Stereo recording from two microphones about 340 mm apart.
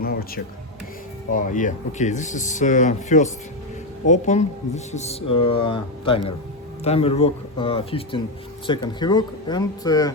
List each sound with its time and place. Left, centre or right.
0.0 s music: left
1.3 s speech: left